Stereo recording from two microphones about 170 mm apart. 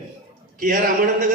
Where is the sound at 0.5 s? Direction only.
50° right (ahead or behind).